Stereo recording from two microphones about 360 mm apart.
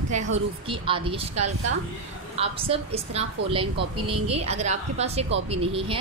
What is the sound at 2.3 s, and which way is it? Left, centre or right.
A woman's voice, centre.